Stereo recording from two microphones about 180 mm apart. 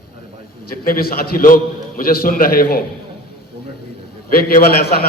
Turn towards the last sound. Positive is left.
turn(degrees=55)  # may be behind; listen again after turning